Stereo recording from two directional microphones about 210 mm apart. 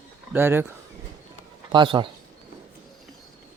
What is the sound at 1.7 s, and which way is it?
Speech, 25° right (ahead or behind).